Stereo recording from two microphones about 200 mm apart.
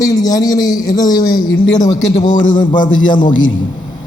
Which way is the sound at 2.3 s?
40° left (ahead or behind).